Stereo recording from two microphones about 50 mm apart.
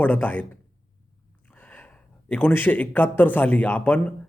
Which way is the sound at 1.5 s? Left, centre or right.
Left.